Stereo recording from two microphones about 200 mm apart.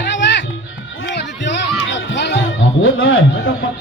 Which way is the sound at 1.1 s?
60° left (ahead or behind).